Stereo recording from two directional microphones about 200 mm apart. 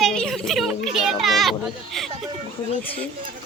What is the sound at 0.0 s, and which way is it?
Children playing, centre (ahead or behind).